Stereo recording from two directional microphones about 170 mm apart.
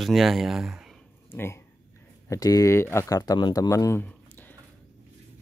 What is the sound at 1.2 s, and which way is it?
Dog, 15° left (ahead or behind).